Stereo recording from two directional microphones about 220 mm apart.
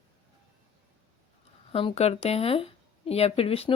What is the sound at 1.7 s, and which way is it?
Speech, 25° left (ahead or behind).